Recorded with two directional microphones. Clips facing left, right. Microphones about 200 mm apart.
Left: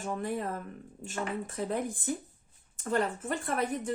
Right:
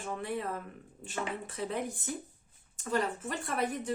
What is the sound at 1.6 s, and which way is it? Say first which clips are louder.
A woman's voice: left 2 dB; 50° left (ahead or behind).